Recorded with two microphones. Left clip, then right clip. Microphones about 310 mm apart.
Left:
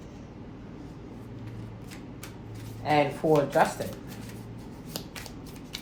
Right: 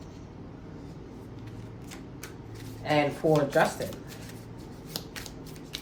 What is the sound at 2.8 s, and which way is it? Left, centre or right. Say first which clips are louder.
Speech: left 1 dB; centre.